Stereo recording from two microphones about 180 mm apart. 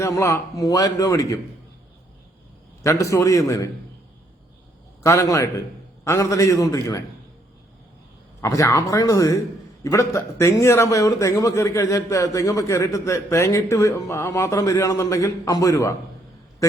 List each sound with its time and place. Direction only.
0.0 s a man's voice: 15° left (ahead or behind)
2.8 s a man's voice: 15° left (ahead or behind)
5.0 s a man's voice: 15° left (ahead or behind)
8.4 s a man's voice: 15° left (ahead or behind)